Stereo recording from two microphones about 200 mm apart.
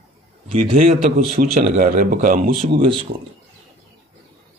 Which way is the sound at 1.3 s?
40° right (ahead or behind).